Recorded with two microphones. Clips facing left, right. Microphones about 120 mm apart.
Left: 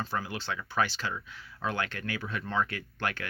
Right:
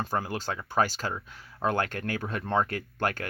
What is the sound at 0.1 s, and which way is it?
Speech, 45° right (ahead or behind).